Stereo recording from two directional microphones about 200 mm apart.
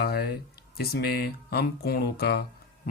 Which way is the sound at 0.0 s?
50° left (ahead or behind).